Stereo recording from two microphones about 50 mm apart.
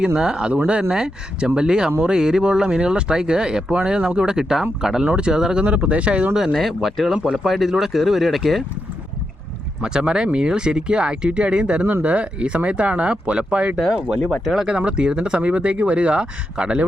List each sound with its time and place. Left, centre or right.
0.0 s speech: centre
5.0 s speech: centre
5.6 s speech: right
6.5 s speech: centre
9.8 s speech: centre
14.4 s speech: centre
14.7 s speech: centre